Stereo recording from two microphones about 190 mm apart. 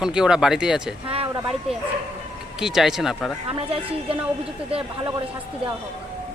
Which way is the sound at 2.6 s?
5° right (ahead or behind).